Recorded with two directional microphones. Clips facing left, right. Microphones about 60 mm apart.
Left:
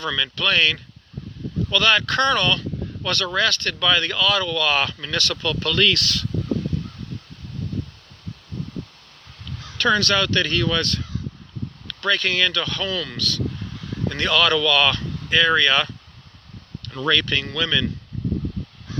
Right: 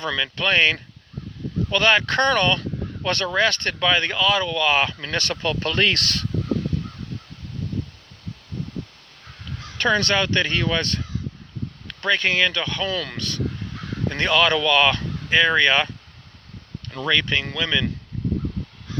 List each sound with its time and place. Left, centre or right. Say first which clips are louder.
0.2 s speech: right 1 dB; right
9.6 s speech: left 1 dB; right
17.0 s speech: left 1 dB; centre